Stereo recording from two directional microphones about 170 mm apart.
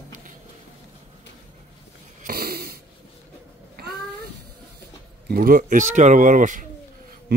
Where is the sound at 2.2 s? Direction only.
60° right (ahead or behind).